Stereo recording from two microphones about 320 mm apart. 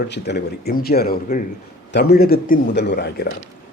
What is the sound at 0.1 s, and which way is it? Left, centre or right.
A man's voice, left.